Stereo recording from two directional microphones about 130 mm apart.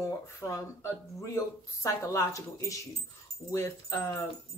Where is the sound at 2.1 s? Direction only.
25° left (ahead or behind).